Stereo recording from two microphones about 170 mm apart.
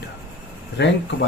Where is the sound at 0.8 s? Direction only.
90° left.